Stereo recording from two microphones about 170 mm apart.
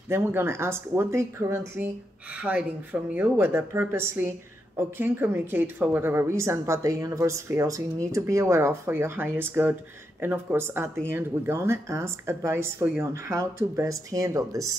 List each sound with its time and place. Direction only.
0.1 s a woman's voice: 15° right (ahead or behind)